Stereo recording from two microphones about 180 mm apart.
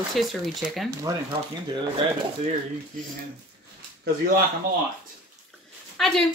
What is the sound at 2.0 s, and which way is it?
Speech, 30° right (ahead or behind).